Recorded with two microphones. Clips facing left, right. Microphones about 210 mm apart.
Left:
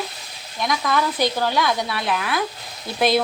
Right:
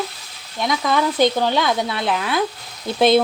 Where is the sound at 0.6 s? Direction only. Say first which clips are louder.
Right 2 dB; 20° right (ahead or behind).